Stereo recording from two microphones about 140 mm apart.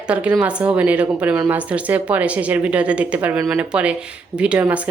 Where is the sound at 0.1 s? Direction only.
10° right (ahead or behind).